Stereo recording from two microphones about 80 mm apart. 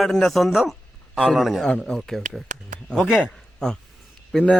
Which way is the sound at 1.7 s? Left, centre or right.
Centre.